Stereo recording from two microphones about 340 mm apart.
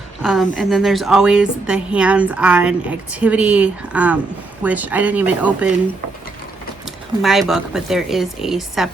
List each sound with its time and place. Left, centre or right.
0.2 s a woman's voice: centre
6.8 s a woman's voice: centre